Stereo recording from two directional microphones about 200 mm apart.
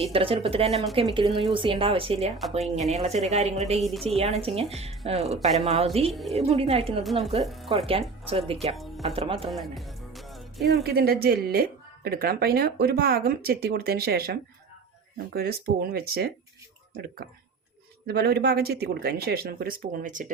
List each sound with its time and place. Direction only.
0.0 s a woman's voice: 30° right (ahead or behind)
3.8 s a woman's voice: centre (ahead or behind)
4.0 s a woman's voice: 30° right (ahead or behind)
6.1 s a woman's voice: centre (ahead or behind)
6.3 s a woman's voice: 30° right (ahead or behind)
7.4 s a woman's voice: centre (ahead or behind)
8.3 s a woman's voice: 30° right (ahead or behind)
9.5 s music: centre (ahead or behind)
10.7 s speech: 50° right (ahead or behind)
15.9 s speech: 50° right (ahead or behind)
18.0 s speech: 55° right (ahead or behind)